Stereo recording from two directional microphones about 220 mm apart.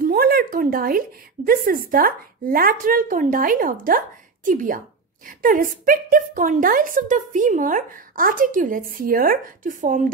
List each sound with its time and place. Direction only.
0.0 s a woman's voice: 40° right (ahead or behind)